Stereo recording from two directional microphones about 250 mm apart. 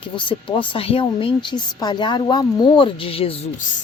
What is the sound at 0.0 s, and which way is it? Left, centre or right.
Speech, centre.